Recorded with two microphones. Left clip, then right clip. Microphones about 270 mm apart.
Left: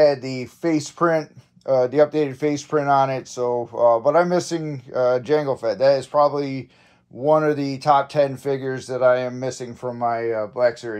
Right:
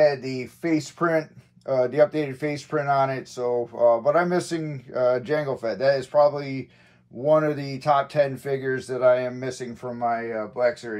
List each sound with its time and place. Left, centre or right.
0.0 s speech: left